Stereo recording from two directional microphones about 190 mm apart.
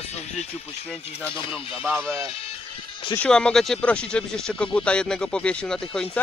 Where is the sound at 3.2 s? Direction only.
5° left (ahead or behind).